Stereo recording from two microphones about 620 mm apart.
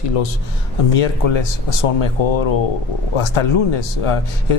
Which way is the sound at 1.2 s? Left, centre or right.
Left.